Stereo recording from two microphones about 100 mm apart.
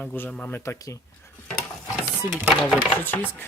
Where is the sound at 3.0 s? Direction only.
20° left (ahead or behind).